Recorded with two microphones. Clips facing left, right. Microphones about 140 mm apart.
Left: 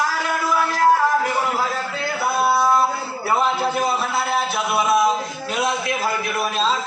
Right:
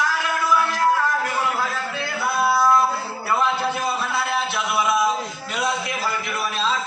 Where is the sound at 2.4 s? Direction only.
20° left (ahead or behind).